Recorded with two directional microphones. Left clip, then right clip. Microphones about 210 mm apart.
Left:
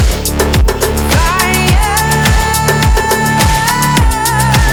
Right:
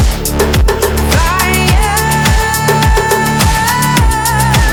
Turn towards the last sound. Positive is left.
turn(degrees=0)  # may be behind; listen again after turning